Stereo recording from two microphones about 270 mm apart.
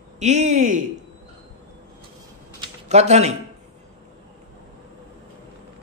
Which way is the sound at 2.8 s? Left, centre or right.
Right.